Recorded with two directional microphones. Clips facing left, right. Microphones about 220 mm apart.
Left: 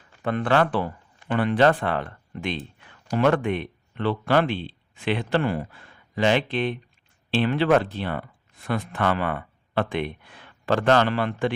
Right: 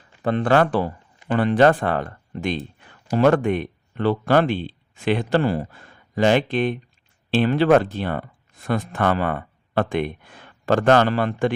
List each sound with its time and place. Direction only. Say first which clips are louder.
0.2 s speech: right 4 dB; 35° right (ahead or behind)